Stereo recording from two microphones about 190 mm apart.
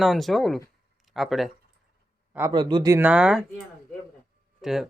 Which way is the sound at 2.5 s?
25° right (ahead or behind).